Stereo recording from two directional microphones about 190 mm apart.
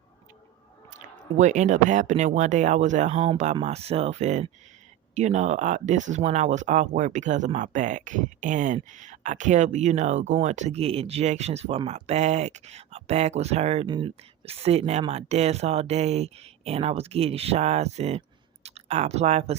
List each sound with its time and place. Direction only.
0.9 s speech: 40° right (ahead or behind)